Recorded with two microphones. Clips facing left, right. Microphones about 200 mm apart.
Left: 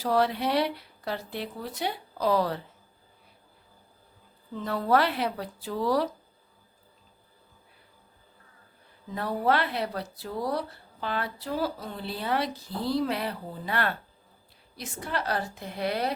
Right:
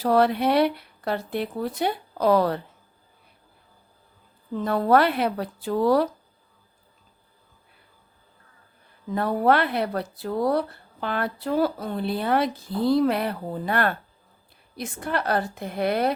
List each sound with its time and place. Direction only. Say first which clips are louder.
0.0 s speech: right 5 dB; 60° right (ahead or behind)
4.5 s speech: right 5 dB; 55° right (ahead or behind)
9.1 s speech: right 5 dB; 55° right (ahead or behind)